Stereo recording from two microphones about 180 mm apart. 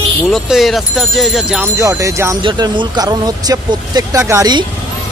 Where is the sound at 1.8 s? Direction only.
15° right (ahead or behind).